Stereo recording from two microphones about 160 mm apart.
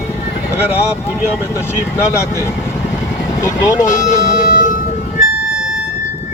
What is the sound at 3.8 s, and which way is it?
Music, 55° left (ahead or behind).